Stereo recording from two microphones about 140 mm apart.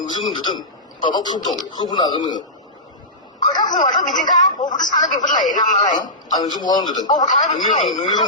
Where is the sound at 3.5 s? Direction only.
30° left (ahead or behind).